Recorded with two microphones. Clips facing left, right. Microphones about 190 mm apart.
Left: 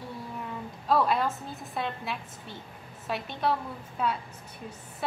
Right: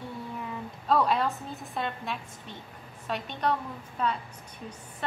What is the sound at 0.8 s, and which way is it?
A woman's voice, centre (ahead or behind).